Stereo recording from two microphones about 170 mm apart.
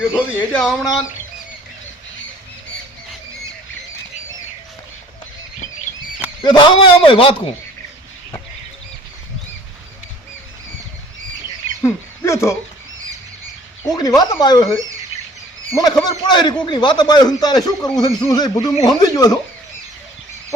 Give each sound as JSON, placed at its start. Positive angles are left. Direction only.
{"t": 0.1, "sound": "speech", "side_deg": 10}
{"t": 6.4, "sound": "a man's voice", "side_deg": 25}
{"t": 11.8, "sound": "speech", "side_deg": 15}
{"t": 13.8, "sound": "a man's voice", "side_deg": 20}